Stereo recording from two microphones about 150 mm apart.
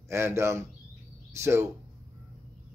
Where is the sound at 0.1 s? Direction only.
15° right (ahead or behind).